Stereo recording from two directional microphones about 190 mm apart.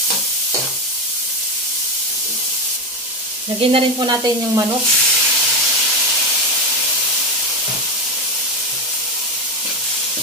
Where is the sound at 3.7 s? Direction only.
20° right (ahead or behind).